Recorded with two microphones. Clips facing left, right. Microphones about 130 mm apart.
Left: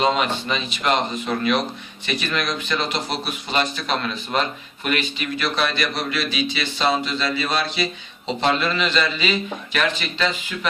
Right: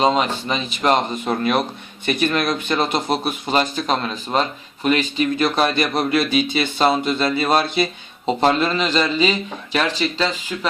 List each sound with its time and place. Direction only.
0.0 s a man's voice: 35° right (ahead or behind)